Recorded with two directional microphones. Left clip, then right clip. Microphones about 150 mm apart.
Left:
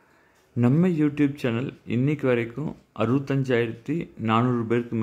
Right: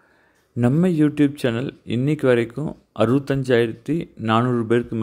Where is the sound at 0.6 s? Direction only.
25° right (ahead or behind).